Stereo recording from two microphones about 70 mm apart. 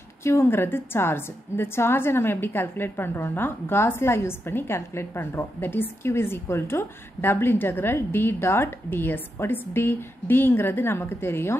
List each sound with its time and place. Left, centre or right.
0.2 s a woman's voice: left